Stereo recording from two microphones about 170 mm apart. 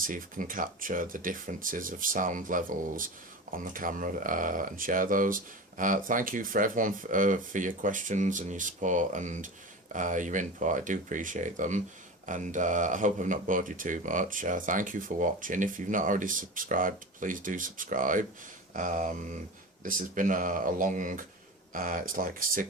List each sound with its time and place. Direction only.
0.0 s speech: 55° right (ahead or behind)